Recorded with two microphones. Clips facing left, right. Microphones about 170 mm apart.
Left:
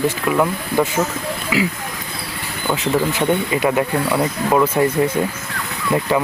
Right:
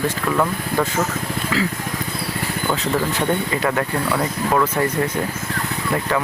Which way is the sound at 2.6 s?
15° left (ahead or behind).